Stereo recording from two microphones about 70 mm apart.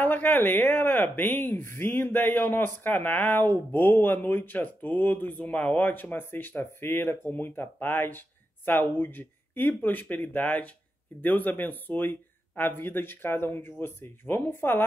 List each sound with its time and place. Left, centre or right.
0.0 s speech: left